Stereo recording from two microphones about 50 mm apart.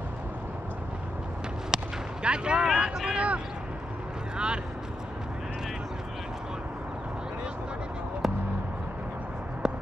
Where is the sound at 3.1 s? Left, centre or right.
Right.